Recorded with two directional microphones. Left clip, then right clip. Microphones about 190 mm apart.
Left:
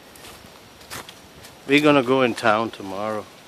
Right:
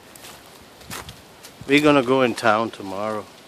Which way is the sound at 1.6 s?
5° right (ahead or behind).